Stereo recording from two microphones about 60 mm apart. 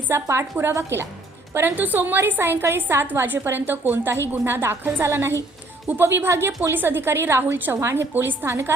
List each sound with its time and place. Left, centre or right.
0.1 s a woman's voice: right
1.7 s a woman's voice: right
6.6 s a woman's voice: right
8.1 s a woman's voice: right